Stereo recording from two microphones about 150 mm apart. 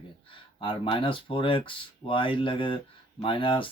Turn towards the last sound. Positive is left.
turn(degrees=35)  # may be behind; listen again after turning